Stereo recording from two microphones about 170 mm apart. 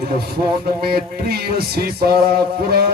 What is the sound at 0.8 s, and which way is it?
Music, 65° right (ahead or behind).